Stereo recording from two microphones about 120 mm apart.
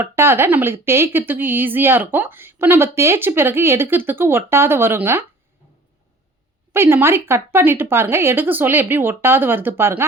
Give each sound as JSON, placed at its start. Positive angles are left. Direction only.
{"t": 0.0, "sound": "speech", "side_deg": -20}
{"t": 6.7, "sound": "speech", "side_deg": -20}